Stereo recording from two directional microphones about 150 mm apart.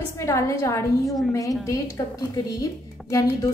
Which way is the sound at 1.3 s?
20° left (ahead or behind).